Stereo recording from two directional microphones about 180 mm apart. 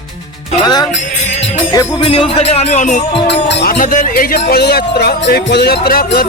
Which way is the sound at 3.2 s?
70° left (ahead or behind).